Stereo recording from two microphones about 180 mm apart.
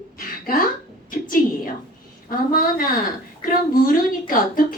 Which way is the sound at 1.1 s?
50° left (ahead or behind).